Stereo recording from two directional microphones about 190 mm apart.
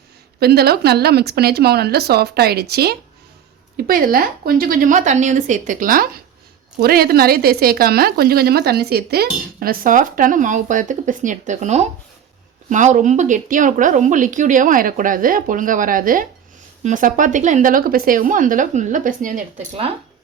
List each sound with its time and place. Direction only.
0.3 s a woman's voice: 55° right (ahead or behind)